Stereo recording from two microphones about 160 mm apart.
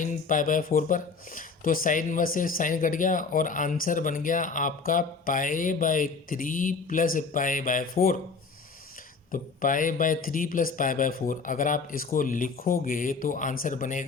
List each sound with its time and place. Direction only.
0.0 s speech: 55° left (ahead or behind)
9.3 s speech: 60° left (ahead or behind)